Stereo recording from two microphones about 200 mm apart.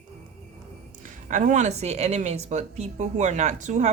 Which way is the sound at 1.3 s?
40° right (ahead or behind).